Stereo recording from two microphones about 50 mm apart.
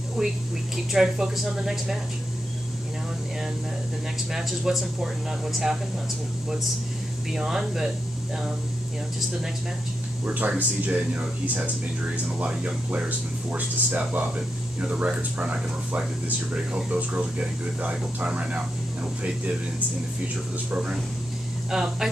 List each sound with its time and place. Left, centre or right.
0.2 s speech: centre
4.3 s speech: centre
7.3 s speech: centre
10.2 s speech: right
13.5 s speech: right
21.6 s speech: centre